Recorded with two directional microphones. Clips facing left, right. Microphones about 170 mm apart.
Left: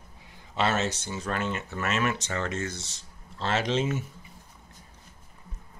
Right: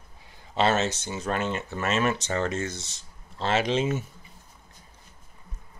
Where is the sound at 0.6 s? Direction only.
25° right (ahead or behind).